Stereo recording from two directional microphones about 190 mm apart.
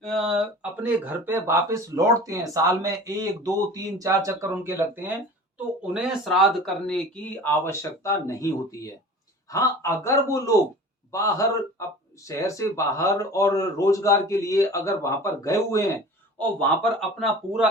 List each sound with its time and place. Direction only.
0.0 s speech: centre (ahead or behind); by 15.8 s 15° left (ahead or behind)
16.4 s speech: 5° left (ahead or behind)